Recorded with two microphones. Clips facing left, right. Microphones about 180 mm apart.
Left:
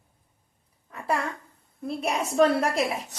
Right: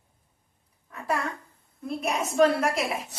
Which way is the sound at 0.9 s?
30° left (ahead or behind).